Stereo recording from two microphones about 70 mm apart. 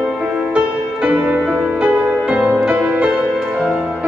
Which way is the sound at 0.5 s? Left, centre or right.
Centre.